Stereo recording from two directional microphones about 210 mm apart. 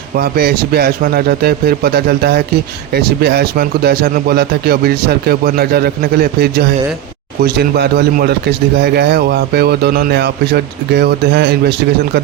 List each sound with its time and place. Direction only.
0.2 s a man's voice: 50° right (ahead or behind)